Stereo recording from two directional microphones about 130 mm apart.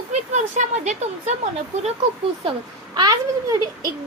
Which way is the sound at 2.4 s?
45° right (ahead or behind).